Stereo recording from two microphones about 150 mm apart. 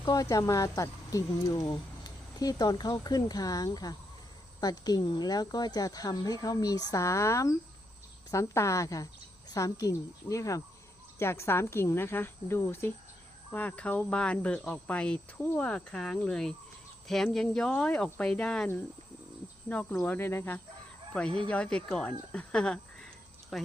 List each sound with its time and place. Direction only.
0.0 s speech: 25° left (ahead or behind)
11.2 s cricket: 15° left (ahead or behind)
17.1 s speech: 5° left (ahead or behind)
19.6 s cricket: 10° left (ahead or behind)
21.1 s speech: 5° left (ahead or behind)